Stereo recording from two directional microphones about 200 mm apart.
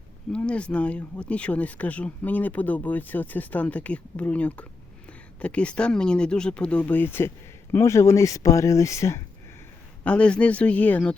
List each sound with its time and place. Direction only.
0.3 s speech: 5° left (ahead or behind)